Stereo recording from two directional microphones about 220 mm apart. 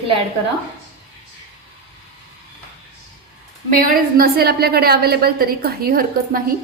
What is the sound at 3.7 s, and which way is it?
A woman's voice, 40° right (ahead or behind).